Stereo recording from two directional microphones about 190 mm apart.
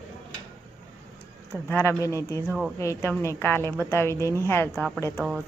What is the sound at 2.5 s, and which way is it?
Speech, 5° right (ahead or behind).